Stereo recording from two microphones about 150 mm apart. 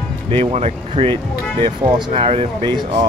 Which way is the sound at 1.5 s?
30° right (ahead or behind).